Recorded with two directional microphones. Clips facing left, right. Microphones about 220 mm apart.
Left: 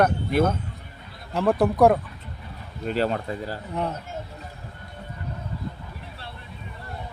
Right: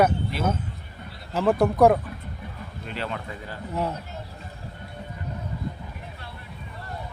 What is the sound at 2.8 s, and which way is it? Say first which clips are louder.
Speech: left 8 dB; 40° left (ahead or behind).